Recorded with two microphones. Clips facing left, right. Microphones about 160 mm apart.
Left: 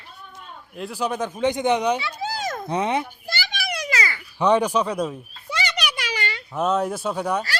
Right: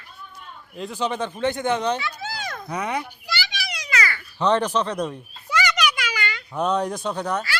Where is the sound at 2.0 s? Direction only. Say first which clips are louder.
Left 3 dB; 35° left (ahead or behind).